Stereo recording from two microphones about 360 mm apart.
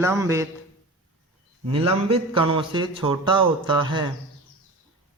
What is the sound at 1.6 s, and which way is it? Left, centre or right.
Speech, centre.